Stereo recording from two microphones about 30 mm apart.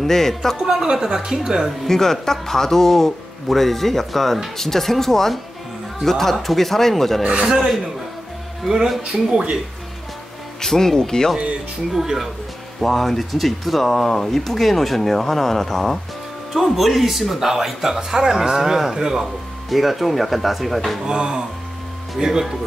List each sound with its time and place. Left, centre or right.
0.0 s speech: centre
0.7 s speech: right
1.9 s speech: centre
7.4 s speech: centre
9.1 s speech: right
10.6 s speech: centre
11.9 s speech: centre
12.8 s speech: centre
16.5 s speech: centre
19.7 s speech: centre
21.0 s speech: right
22.2 s speech: centre